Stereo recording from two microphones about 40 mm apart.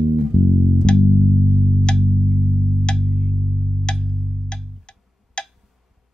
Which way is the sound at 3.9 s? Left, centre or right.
Left.